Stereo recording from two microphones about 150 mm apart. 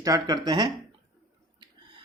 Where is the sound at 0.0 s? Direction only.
25° right (ahead or behind).